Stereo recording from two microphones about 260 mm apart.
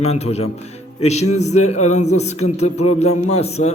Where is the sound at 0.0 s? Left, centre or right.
Left.